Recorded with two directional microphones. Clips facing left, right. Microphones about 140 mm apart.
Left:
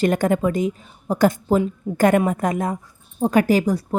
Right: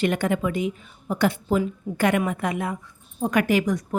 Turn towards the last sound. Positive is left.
turn(degrees=35)  # may be behind; listen again after turning